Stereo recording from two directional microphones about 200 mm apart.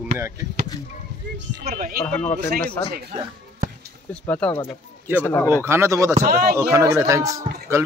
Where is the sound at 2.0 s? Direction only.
10° left (ahead or behind).